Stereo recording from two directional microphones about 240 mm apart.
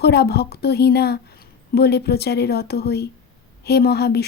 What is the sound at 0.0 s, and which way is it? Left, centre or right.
A woman's voice, left.